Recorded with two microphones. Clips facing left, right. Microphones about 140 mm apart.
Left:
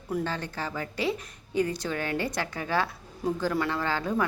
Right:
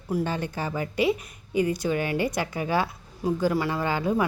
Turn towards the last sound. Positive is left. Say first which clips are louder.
# right 3 dB
turn(degrees=-10)  # may be behind; listen again after turning